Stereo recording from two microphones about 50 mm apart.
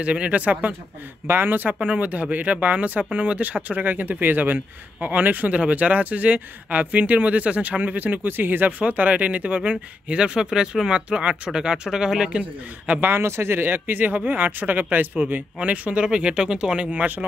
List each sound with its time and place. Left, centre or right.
0.0 s speech: right
1.2 s speech: right; by 12.4 s centre
12.4 s speech: right
13.2 s speech: right